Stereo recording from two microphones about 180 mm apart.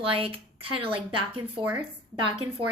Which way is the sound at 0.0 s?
30° right (ahead or behind).